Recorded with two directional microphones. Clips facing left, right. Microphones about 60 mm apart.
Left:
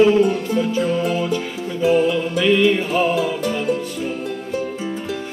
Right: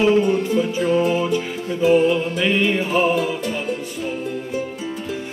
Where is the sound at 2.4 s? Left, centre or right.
Right.